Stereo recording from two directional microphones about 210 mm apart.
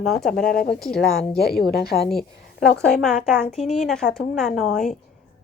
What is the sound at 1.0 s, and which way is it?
A woman's voice, 50° left (ahead or behind).